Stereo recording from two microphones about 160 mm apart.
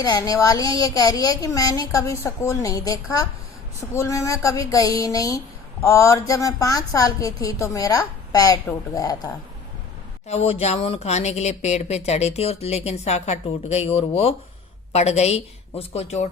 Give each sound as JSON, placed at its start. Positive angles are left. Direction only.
{"t": 0.0, "sound": "speech", "side_deg": 20}
{"t": 10.2, "sound": "a woman's voice", "side_deg": 40}